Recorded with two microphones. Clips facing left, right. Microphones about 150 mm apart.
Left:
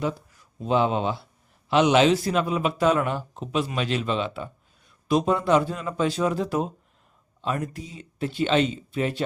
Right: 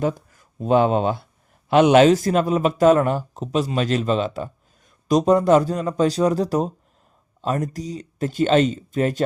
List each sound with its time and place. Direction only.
0.0 s a man's voice: 45° right (ahead or behind)